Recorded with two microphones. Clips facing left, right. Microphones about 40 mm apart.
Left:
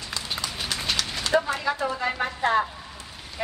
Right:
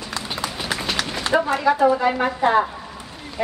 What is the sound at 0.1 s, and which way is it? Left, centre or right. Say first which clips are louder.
Run: right 4 dB; centre.